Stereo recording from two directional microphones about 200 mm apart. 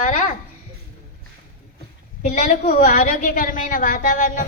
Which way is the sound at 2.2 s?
40° left (ahead or behind).